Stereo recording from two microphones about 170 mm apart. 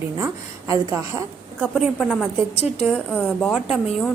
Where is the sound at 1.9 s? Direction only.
10° left (ahead or behind).